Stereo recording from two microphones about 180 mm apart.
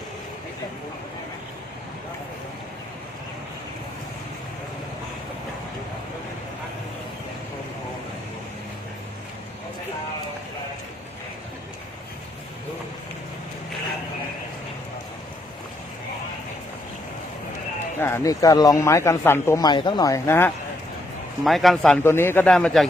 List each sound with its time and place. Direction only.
18.0 s a man's voice: 15° left (ahead or behind)
21.4 s speech: centre (ahead or behind)
22.0 s a man's voice: 15° left (ahead or behind)